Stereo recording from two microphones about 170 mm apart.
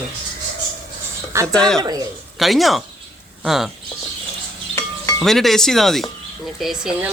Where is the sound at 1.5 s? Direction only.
5° left (ahead or behind).